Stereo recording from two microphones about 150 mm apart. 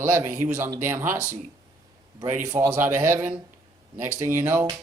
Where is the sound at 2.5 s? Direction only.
15° right (ahead or behind).